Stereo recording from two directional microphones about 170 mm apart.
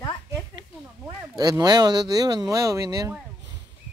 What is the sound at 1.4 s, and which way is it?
Speech, 20° right (ahead or behind).